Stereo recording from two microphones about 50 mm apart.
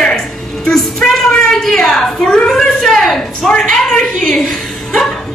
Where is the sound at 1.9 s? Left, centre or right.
Centre.